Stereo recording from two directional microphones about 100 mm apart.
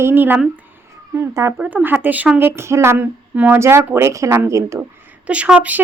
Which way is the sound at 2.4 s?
25° right (ahead or behind).